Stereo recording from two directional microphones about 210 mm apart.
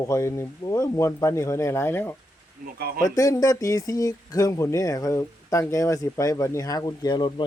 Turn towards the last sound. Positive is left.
turn(degrees=20)  # may be behind; listen again after turning